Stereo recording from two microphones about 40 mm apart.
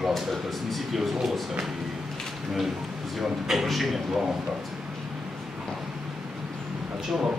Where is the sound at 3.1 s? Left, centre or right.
Centre.